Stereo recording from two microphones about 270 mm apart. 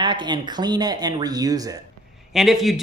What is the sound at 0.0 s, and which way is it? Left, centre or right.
Speech, centre.